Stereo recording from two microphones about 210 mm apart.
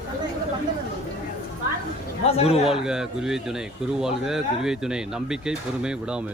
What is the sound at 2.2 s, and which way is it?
Speech, 30° left (ahead or behind).